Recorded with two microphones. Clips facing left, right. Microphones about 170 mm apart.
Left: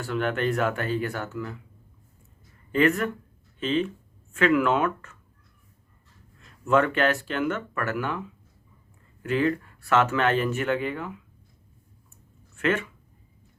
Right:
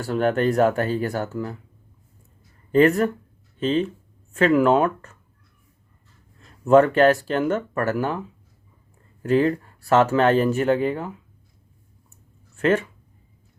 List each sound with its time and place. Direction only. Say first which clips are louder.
0.0 s speech: right 6 dB; 40° right (ahead or behind)
2.7 s speech: right 6 dB; 35° right (ahead or behind)
6.4 s speech: right 7 dB; 40° right (ahead or behind)
9.2 s speech: right 5 dB; 35° right (ahead or behind)
12.5 s speech: right 5 dB; 35° right (ahead or behind)